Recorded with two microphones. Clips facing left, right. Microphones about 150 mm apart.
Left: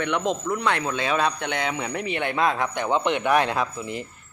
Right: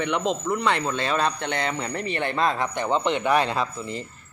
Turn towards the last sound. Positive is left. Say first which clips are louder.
# left 1 dB
turn(degrees=5)  # may be behind; listen again after turning